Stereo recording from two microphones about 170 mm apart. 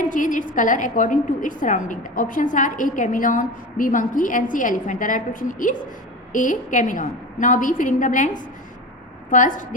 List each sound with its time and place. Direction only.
0.1 s a woman's voice: 50° left (ahead or behind)